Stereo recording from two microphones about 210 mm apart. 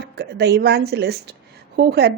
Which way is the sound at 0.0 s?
55° right (ahead or behind).